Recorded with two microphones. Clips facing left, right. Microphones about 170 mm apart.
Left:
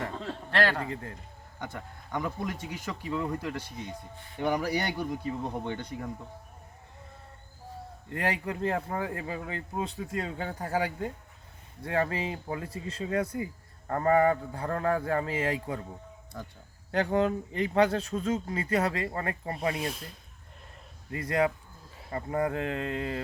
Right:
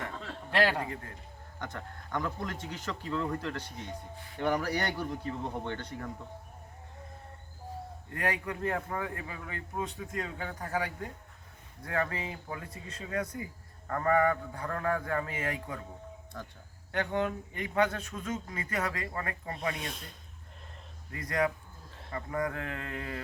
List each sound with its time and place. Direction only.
0.0 s a sound: 35° left (ahead or behind)
0.5 s a man's voice: 10° right (ahead or behind)
1.5 s speech: 10° left (ahead or behind)
8.1 s speech: 30° left (ahead or behind)
16.3 s speech: 10° left (ahead or behind)
16.9 s speech: 35° left (ahead or behind)
19.7 s speech: centre (ahead or behind)
21.1 s speech: 25° left (ahead or behind)